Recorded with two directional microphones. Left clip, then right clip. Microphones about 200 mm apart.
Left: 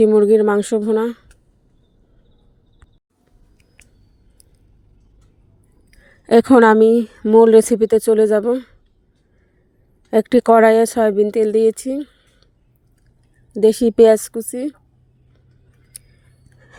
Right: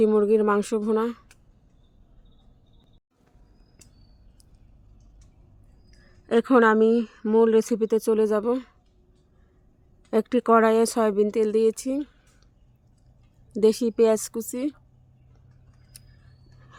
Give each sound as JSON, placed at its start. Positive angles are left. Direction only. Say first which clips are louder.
{"t": 0.2, "sound": "speech", "louder": "left 7 dB", "side_deg": 20}
{"t": 5.9, "sound": "a woman's voice", "louder": "left 10 dB", "side_deg": 25}
{"t": 7.2, "sound": "speech", "louder": "left 11 dB", "side_deg": 10}
{"t": 7.4, "sound": "speech", "louder": "left 10 dB", "side_deg": 25}
{"t": 10.1, "sound": "speech", "louder": "left 8 dB", "side_deg": 20}
{"t": 13.5, "sound": "speech", "louder": "left 7 dB", "side_deg": 10}
{"t": 14.2, "sound": "speech", "louder": "left 5 dB", "side_deg": 10}
{"t": 15.9, "sound": "a sound", "louder": "left 8 dB", "side_deg": 15}